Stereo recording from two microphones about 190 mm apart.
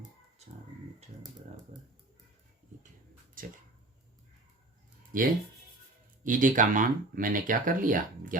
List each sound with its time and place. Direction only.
5.1 s speech: 45° right (ahead or behind)